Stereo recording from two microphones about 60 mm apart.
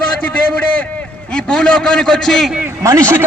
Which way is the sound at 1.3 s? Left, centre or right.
Centre.